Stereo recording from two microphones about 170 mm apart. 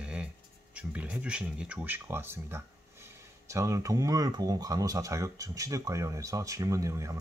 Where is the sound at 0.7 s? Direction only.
5° right (ahead or behind).